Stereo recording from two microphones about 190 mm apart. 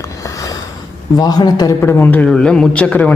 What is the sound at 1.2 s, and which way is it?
A man's voice, 20° left (ahead or behind).